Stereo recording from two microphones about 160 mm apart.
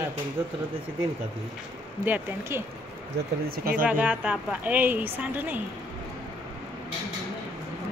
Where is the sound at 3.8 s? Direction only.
10° right (ahead or behind).